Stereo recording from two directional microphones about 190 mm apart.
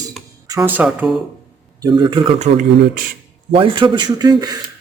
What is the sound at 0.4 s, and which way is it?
Speech, 15° right (ahead or behind).